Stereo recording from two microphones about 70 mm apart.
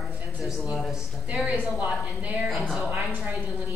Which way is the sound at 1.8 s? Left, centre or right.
Centre.